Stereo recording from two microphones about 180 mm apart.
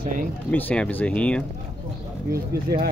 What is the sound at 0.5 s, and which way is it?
Speech, 5° left (ahead or behind).